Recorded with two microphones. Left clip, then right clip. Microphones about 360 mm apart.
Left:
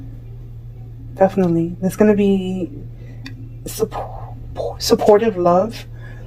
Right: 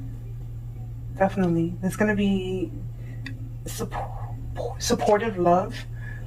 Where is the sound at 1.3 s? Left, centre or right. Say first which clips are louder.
Left 7 dB; left.